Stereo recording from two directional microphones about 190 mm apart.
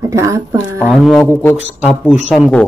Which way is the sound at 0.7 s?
5° left (ahead or behind).